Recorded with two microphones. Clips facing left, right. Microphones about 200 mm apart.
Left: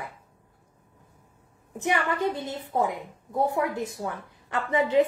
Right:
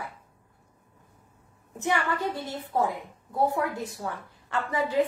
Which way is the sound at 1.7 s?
20° left (ahead or behind).